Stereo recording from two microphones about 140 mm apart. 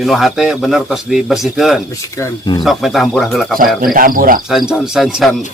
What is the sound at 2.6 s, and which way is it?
Speech, centre (ahead or behind).